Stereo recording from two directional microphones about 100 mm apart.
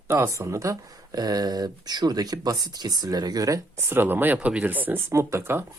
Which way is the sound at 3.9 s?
20° right (ahead or behind).